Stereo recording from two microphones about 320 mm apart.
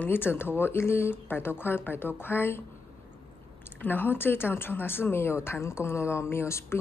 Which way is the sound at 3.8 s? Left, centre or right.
Centre.